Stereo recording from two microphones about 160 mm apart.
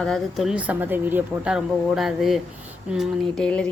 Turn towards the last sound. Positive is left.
turn(degrees=5)  # may be behind; listen again after turning